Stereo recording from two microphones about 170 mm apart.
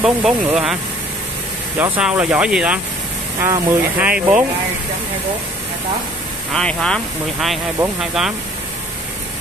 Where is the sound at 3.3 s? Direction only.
15° right (ahead or behind).